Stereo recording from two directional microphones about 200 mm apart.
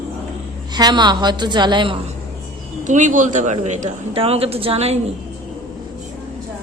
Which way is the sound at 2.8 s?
40° right (ahead or behind).